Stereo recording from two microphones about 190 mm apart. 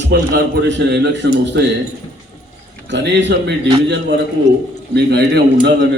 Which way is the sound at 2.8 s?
70° right (ahead or behind).